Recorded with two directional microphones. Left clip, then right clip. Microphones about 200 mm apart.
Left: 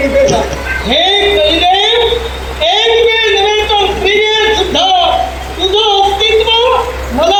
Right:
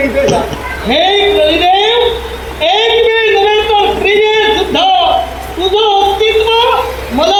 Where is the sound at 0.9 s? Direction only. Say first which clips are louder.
Right 1 dB; 35° left (ahead or behind).